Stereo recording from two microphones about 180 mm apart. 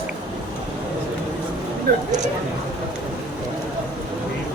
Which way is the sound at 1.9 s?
60° right (ahead or behind).